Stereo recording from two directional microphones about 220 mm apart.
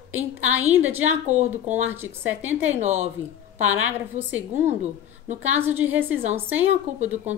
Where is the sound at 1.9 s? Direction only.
10° right (ahead or behind).